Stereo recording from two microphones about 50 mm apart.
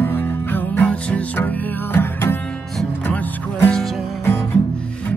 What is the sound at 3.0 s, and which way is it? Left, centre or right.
Music, left.